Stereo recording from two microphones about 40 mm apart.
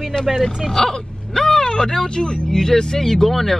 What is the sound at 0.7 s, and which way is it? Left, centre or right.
Speech, centre.